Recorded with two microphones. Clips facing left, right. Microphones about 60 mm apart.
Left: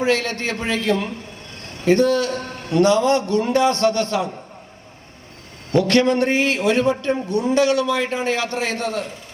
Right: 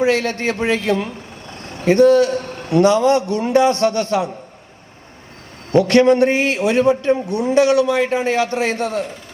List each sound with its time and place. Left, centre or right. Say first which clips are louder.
0.0 s a man's voice: right 3 dB; right
5.9 s speech: right 5 dB; right